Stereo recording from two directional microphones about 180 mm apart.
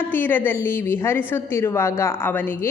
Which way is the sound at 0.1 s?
10° left (ahead or behind).